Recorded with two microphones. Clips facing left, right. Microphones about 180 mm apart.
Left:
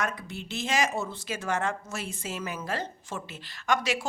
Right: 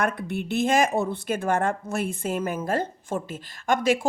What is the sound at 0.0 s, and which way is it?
Speech, 60° right (ahead or behind).